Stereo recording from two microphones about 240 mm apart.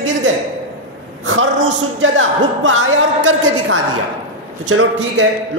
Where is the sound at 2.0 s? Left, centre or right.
Right.